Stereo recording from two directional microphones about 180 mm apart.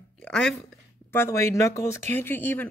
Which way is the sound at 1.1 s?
15° left (ahead or behind).